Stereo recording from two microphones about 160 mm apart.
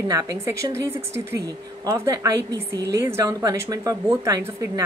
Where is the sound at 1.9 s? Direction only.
20° right (ahead or behind).